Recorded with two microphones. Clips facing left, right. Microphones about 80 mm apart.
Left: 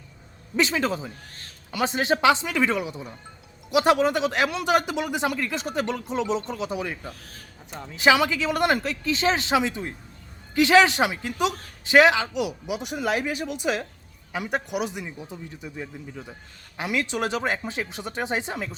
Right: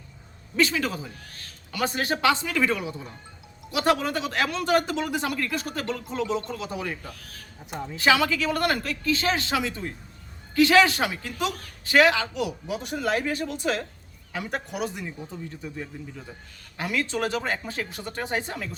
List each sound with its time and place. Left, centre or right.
0.5 s speech: left
7.7 s a woman's voice: centre
7.9 s speech: centre